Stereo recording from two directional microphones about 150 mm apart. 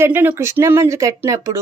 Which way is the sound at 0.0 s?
15° right (ahead or behind).